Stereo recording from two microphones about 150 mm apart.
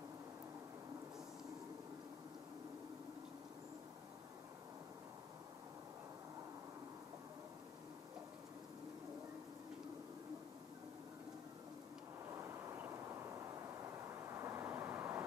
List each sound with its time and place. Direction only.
12.4 s vehicle: 20° right (ahead or behind)